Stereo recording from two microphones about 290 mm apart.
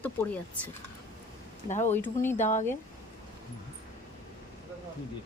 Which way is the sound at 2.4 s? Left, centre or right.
Left.